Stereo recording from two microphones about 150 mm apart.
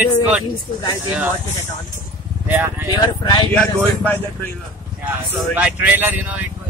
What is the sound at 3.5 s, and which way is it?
Speech, 5° left (ahead or behind).